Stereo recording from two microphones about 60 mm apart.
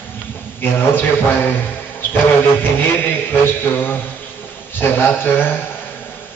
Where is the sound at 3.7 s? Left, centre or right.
Left.